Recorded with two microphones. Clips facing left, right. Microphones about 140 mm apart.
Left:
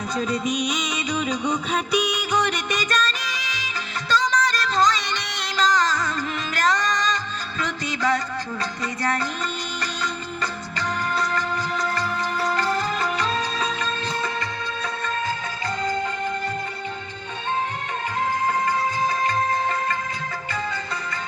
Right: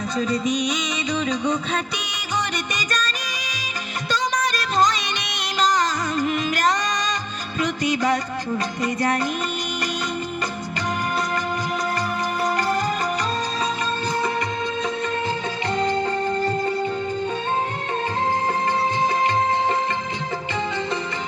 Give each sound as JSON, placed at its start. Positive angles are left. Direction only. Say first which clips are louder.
{"t": 0.2, "sound": "music", "louder": "right 2 dB", "side_deg": 10}
{"t": 4.1, "sound": "music", "louder": "left 2 dB", "side_deg": -20}
{"t": 12.4, "sound": "music", "louder": "right 1 dB", "side_deg": -15}
{"t": 15.8, "sound": "music", "louder": "right 4 dB", "side_deg": -30}
{"t": 18.2, "sound": "music", "louder": "left 1 dB", "side_deg": -30}